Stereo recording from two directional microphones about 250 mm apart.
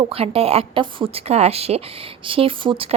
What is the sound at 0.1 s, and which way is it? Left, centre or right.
Speech, right.